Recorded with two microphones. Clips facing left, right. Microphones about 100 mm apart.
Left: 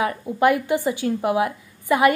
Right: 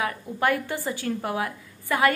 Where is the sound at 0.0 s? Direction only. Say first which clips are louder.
Left 6 dB; 20° left (ahead or behind).